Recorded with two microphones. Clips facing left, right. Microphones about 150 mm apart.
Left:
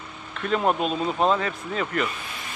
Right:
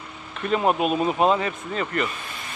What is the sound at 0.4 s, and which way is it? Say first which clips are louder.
A man's voice: right 2 dB; 5° right (ahead or behind).